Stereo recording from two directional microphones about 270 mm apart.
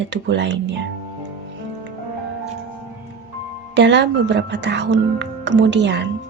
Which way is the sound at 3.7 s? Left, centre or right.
Right.